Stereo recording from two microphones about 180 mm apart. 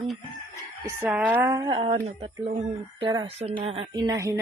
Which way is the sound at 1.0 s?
10° right (ahead or behind).